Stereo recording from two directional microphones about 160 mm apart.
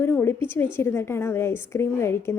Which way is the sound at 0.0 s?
15° left (ahead or behind).